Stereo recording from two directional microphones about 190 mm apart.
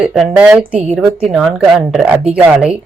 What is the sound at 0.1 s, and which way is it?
Speech, centre (ahead or behind).